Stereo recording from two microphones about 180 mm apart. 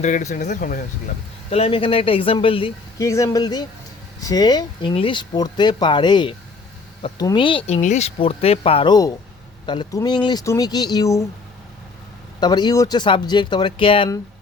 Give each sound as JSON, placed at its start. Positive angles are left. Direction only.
{"t": 0.0, "sound": "speech", "side_deg": 40}
{"t": 1.5, "sound": "speech", "side_deg": 35}
{"t": 3.0, "sound": "speech", "side_deg": 15}
{"t": 7.8, "sound": "speech", "side_deg": 40}
{"t": 12.4, "sound": "speech", "side_deg": 25}